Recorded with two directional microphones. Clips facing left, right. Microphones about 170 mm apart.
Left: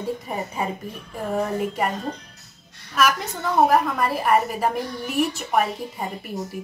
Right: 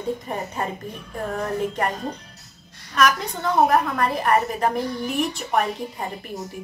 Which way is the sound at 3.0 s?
5° left (ahead or behind).